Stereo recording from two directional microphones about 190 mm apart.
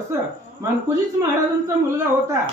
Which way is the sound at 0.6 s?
15° right (ahead or behind).